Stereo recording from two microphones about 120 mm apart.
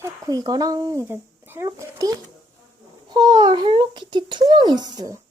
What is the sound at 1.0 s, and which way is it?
A child's voice, 20° right (ahead or behind).